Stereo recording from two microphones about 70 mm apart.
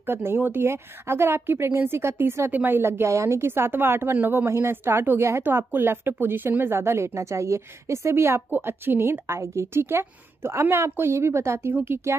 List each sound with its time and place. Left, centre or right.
0.0 s a woman's voice: right